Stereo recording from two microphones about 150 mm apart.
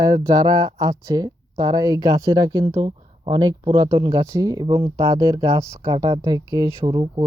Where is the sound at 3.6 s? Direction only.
35° right (ahead or behind).